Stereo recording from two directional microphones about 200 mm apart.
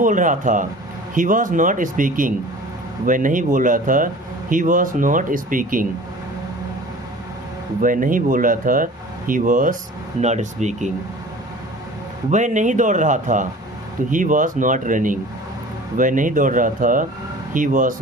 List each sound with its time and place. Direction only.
0.0 s speech: 40° right (ahead or behind)
7.8 s speech: 45° right (ahead or behind)
12.3 s speech: 40° right (ahead or behind)